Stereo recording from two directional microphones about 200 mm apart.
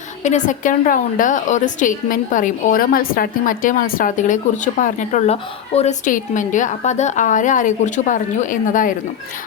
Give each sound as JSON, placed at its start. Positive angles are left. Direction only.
{"t": 0.2, "sound": "a woman's voice", "side_deg": 35}